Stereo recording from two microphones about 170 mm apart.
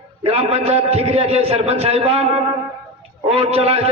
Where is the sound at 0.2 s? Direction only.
35° right (ahead or behind).